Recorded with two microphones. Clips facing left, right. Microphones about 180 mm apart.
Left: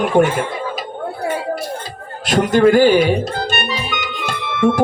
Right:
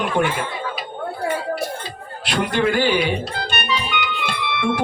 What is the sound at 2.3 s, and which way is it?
Music, 45° left (ahead or behind).